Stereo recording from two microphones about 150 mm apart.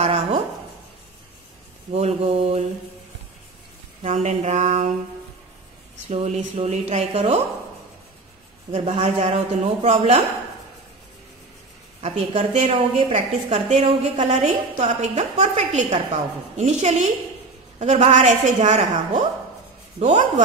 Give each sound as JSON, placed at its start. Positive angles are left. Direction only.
{"t": 0.0, "sound": "a sound", "side_deg": -45}
{"t": 1.9, "sound": "a woman's voice", "side_deg": -45}
{"t": 4.0, "sound": "a sound", "side_deg": -50}
{"t": 6.1, "sound": "a woman's voice", "side_deg": -50}
{"t": 8.7, "sound": "a woman's voice", "side_deg": -45}
{"t": 12.0, "sound": "a woman's voice", "side_deg": -45}